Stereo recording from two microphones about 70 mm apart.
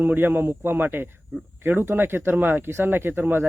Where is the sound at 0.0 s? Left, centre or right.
Right.